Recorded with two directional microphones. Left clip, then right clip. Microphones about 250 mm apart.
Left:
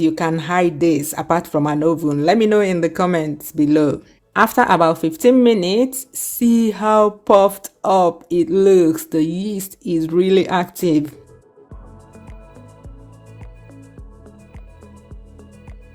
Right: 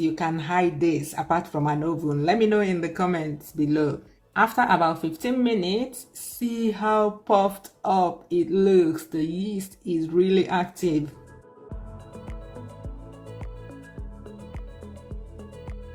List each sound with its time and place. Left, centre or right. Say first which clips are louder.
0.0 s speech: left 7 dB; left